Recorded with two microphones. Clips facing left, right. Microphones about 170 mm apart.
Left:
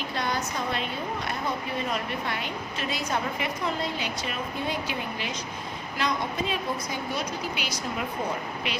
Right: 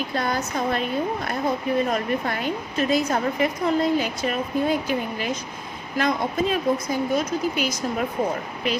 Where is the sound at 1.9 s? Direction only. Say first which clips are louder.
Right 6 dB; 45° right (ahead or behind).